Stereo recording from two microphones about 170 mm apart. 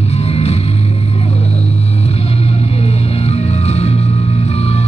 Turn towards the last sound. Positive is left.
turn(degrees=40)  # may be behind; listen again after turning